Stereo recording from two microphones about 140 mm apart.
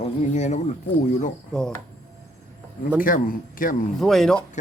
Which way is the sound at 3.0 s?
75° left (ahead or behind).